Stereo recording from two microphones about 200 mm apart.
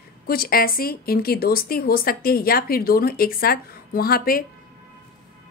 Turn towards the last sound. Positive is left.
turn(degrees=45)  # may be behind; listen again after turning